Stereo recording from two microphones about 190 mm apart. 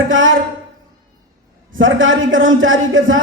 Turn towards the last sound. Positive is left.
turn(degrees=-90)